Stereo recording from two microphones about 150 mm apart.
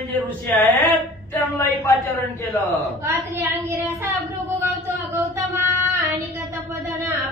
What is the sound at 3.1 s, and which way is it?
Speech, 15° right (ahead or behind).